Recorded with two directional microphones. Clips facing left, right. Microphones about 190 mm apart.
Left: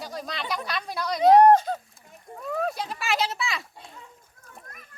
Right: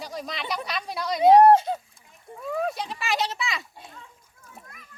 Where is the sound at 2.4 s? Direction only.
Centre (ahead or behind).